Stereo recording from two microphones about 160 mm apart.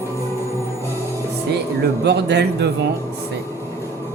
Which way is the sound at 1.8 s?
90° right.